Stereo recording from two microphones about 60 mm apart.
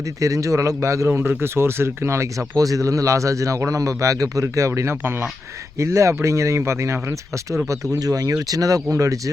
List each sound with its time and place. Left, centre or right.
0.2 s a man's voice: right
2.6 s a man's voice: right
7.9 s speech: right